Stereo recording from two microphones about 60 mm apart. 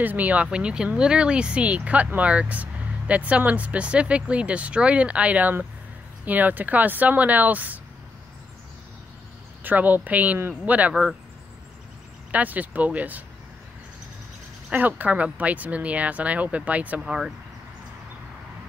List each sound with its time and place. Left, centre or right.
0.0 s speech: right
9.6 s speech: right
12.3 s speech: right
14.7 s speech: right
17.0 s speech: centre